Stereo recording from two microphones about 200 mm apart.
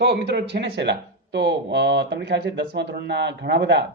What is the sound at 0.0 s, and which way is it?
Speech, 55° right (ahead or behind).